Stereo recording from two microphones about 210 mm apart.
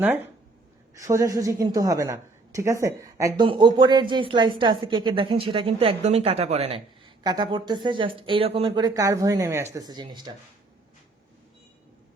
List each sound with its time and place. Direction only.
0.9 s a woman's voice: 15° right (ahead or behind)